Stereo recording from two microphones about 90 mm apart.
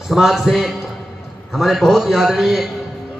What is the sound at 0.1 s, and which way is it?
A man's voice, centre (ahead or behind).